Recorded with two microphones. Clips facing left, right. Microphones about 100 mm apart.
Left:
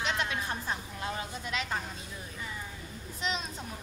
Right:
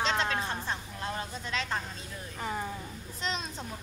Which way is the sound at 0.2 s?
30° right (ahead or behind).